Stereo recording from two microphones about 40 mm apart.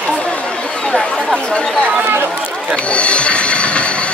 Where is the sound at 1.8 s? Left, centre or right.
Right.